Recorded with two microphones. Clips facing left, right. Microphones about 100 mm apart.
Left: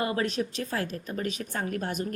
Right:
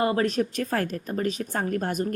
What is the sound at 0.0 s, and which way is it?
A woman's voice, 35° right (ahead or behind).